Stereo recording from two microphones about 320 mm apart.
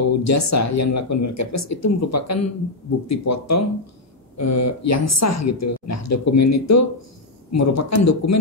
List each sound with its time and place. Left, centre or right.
0.0 s speech: left